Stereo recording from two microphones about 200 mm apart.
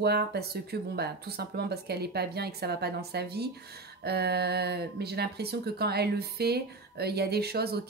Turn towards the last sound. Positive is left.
turn(degrees=-50)  # may be behind; listen again after turning